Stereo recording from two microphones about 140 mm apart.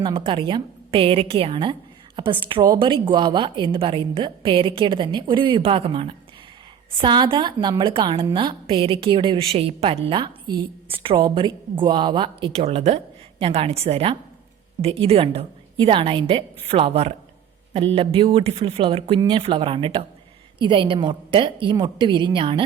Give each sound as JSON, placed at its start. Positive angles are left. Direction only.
{"t": 0.0, "sound": "a woman's voice", "side_deg": -40}